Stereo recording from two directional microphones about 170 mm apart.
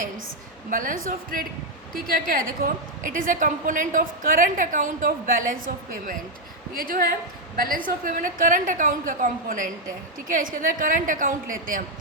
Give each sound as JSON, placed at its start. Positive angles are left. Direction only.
{"t": 0.7, "sound": "a woman's voice", "side_deg": -50}